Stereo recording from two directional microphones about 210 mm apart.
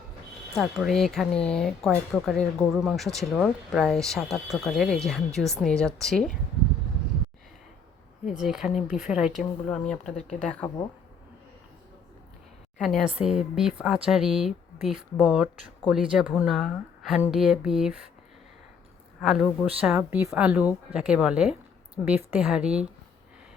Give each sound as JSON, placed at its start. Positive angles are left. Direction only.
{"t": 0.5, "sound": "speech", "side_deg": 0}
{"t": 8.3, "sound": "speech", "side_deg": 0}
{"t": 12.8, "sound": "speech", "side_deg": 0}
{"t": 19.2, "sound": "speech", "side_deg": 0}